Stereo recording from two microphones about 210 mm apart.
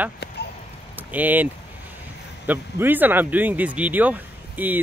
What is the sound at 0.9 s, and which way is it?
Speech, 10° right (ahead or behind).